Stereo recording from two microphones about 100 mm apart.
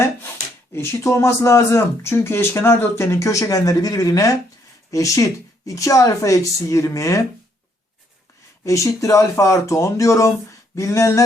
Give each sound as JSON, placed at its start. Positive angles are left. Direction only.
{"t": 0.7, "sound": "speech", "side_deg": 25}
{"t": 8.6, "sound": "speech", "side_deg": 30}